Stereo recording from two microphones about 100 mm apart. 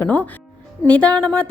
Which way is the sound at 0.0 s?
15° left (ahead or behind).